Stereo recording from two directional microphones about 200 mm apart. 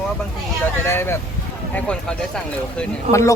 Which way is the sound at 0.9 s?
10° left (ahead or behind).